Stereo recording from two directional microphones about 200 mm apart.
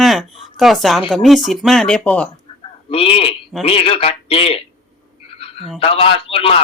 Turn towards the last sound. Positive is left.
turn(degrees=30)  # may be behind; listen again after turning